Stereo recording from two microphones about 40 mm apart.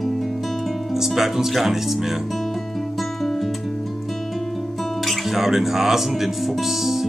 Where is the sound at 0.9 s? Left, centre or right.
Centre.